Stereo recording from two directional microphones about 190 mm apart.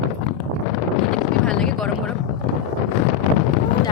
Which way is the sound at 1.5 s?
5° left (ahead or behind).